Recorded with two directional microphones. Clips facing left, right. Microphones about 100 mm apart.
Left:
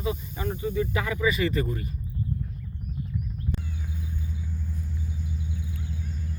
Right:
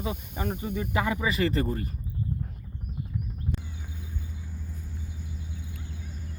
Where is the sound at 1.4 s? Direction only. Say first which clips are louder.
Even; 40° right (ahead or behind).